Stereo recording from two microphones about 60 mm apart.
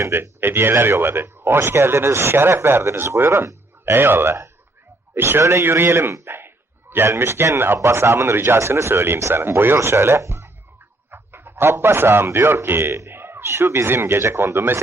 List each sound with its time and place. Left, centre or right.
0.0 s speech: right
6.2 s a sound: right
6.9 s speech: right